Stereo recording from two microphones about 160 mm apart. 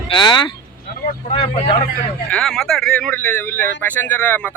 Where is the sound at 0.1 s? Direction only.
25° left (ahead or behind).